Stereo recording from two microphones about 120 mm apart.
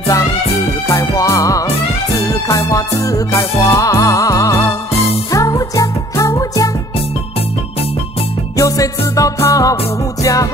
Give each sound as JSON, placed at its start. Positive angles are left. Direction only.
{"t": 0.8, "sound": "music", "side_deg": 25}
{"t": 8.5, "sound": "music", "side_deg": 30}